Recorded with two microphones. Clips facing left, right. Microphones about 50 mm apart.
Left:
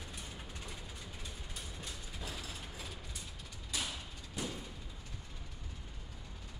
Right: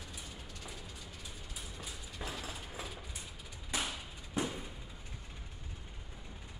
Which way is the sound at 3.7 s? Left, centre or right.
Right.